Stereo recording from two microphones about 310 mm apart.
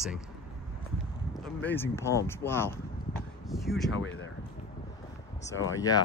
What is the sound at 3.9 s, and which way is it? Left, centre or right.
Speech, left.